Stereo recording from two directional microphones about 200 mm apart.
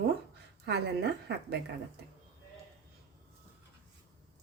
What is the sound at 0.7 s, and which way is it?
Speech, 55° right (ahead or behind).